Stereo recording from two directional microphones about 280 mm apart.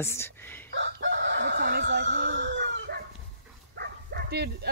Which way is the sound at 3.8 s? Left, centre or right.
Right.